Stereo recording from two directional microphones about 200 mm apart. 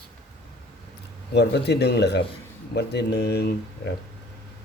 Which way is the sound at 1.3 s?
55° left (ahead or behind).